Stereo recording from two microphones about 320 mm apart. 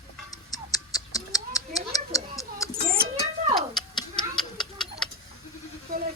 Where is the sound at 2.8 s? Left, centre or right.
Right.